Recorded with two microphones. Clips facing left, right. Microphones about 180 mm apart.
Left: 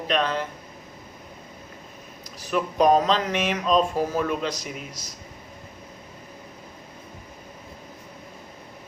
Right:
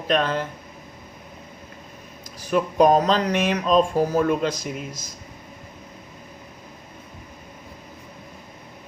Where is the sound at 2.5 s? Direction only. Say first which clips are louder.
Right 2 dB; 45° right (ahead or behind).